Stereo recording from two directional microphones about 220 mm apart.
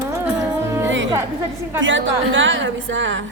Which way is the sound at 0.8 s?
60° right (ahead or behind).